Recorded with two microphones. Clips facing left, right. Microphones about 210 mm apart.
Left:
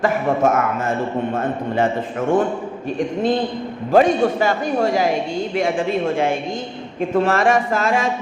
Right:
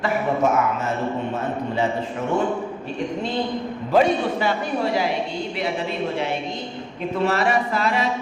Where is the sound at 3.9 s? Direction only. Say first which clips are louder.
Left 4 dB; 50° left (ahead or behind).